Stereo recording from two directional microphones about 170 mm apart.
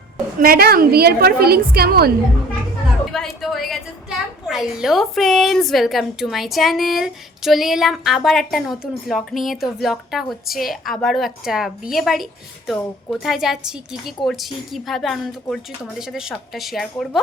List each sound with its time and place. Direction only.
0.3 s a woman's voice: 60° right (ahead or behind)
3.1 s a woman's voice: centre (ahead or behind)